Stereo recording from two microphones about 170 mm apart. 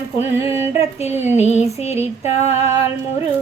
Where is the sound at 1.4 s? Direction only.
40° left (ahead or behind).